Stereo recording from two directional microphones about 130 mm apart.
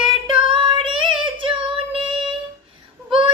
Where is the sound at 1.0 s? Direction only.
40° right (ahead or behind).